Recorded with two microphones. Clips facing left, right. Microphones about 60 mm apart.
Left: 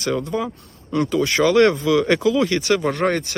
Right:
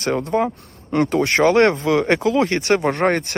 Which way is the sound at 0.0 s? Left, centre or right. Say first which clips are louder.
Right 3 dB; right.